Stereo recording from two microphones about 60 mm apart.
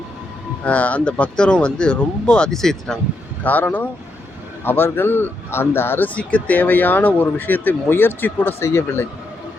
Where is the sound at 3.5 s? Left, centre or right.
Left.